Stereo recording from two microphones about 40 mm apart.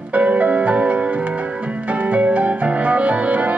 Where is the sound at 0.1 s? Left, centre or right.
Right.